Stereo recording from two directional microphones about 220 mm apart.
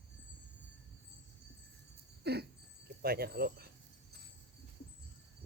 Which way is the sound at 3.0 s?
45° right (ahead or behind).